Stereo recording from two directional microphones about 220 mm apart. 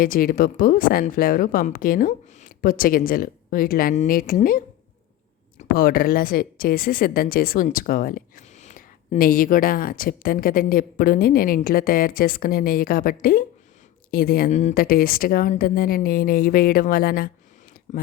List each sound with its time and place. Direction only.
0.0 s speech: 40° left (ahead or behind)